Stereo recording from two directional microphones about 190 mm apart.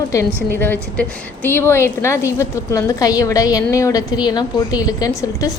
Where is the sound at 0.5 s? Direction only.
10° left (ahead or behind).